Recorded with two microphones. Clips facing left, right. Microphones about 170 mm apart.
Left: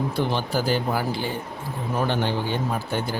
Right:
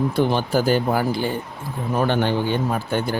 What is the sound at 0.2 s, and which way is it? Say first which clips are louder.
A man's voice: right 5 dB; 50° right (ahead or behind).